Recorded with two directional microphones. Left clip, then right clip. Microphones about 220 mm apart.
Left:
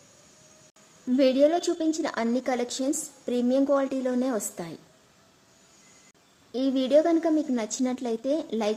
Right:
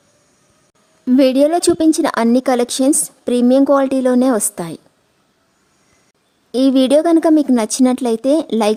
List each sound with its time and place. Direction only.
1.0 s speech: 50° right (ahead or behind)
6.5 s speech: 50° right (ahead or behind)